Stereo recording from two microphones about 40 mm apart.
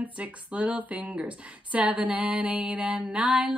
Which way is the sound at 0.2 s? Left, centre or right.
Right.